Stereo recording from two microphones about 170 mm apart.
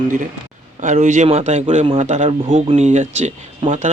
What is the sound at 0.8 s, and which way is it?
A man's voice, 45° right (ahead or behind).